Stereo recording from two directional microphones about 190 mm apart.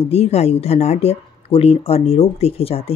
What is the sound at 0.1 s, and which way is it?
Speech, 35° left (ahead or behind).